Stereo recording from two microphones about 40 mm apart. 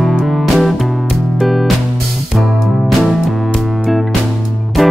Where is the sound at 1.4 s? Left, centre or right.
Centre.